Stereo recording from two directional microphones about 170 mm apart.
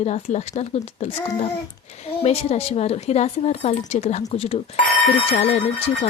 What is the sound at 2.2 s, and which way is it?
Speech, 35° left (ahead or behind).